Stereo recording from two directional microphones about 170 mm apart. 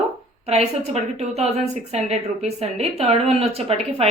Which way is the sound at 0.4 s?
40° right (ahead or behind).